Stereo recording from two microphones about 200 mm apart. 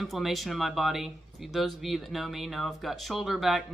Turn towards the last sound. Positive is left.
turn(degrees=0)  # may be behind; listen again after turning